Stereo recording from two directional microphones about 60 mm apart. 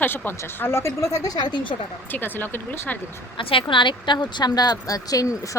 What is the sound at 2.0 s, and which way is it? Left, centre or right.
Speech, left.